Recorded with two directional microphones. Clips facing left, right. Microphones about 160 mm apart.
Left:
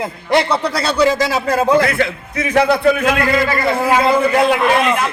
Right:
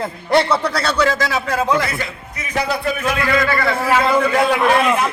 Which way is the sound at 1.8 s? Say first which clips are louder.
Left 8 dB; 65° left (ahead or behind).